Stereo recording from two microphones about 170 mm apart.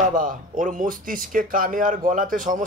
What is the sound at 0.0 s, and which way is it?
Speech, 50° right (ahead or behind).